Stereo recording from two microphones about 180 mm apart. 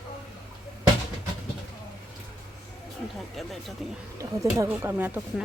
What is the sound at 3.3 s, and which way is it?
Speech, centre (ahead or behind).